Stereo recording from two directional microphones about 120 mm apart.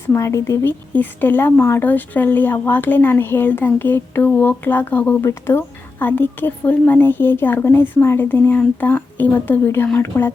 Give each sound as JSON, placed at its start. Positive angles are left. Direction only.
{"t": 0.1, "sound": "speech", "side_deg": 25}